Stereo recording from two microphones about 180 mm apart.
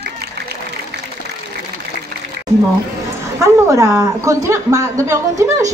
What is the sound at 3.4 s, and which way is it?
A woman's voice, 15° right (ahead or behind).